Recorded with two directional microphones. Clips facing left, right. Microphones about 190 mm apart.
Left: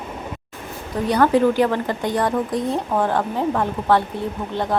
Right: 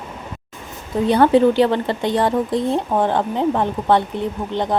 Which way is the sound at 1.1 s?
25° right (ahead or behind).